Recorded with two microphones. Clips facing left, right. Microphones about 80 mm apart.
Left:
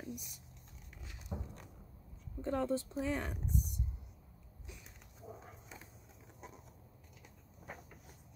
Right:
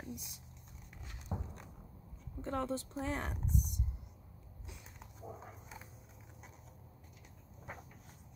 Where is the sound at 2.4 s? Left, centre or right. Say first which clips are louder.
Left 2 dB; right.